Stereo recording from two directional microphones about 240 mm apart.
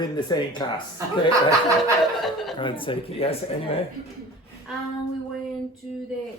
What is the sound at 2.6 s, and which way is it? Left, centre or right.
Speech, left.